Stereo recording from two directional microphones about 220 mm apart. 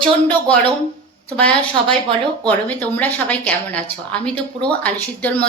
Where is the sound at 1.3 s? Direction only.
5° left (ahead or behind).